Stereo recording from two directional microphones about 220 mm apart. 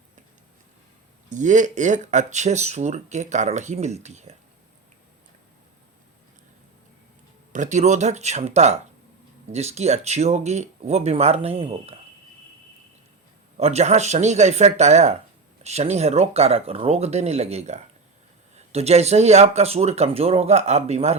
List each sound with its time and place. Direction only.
1.3 s speech: 35° right (ahead or behind)
7.5 s speech: 35° right (ahead or behind)
13.6 s speech: 30° right (ahead or behind)